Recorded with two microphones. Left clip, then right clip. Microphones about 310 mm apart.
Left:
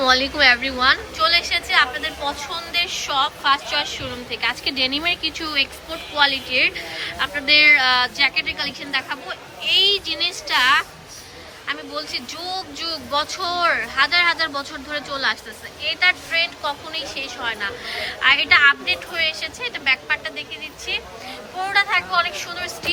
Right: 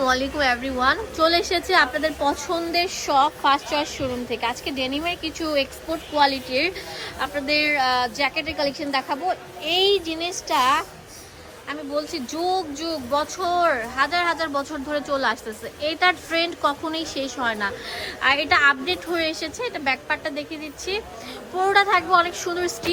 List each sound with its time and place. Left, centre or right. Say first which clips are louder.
0.0 s a woman's voice: left 5 dB; centre
21.7 s a woman's voice: right 1 dB; centre